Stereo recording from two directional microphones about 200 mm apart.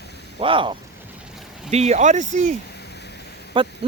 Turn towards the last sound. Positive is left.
turn(degrees=-25)  # may be behind; listen again after turning